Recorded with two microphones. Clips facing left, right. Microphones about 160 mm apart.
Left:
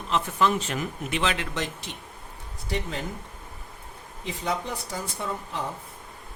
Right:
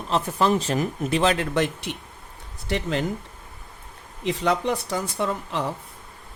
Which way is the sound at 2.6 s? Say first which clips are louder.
Right 6 dB; 80° right.